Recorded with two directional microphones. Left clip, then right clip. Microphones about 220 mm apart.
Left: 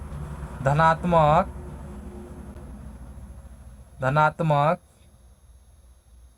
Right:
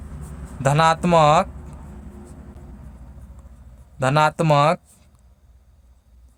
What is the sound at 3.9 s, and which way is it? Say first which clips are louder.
Speech: right 3 dB; 50° right (ahead or behind).